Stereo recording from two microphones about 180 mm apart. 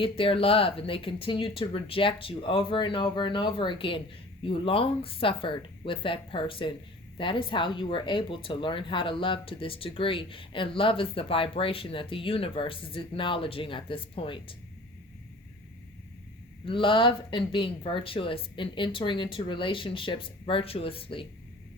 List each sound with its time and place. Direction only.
0.0 s speech: 30° left (ahead or behind)
16.6 s speech: 30° left (ahead or behind)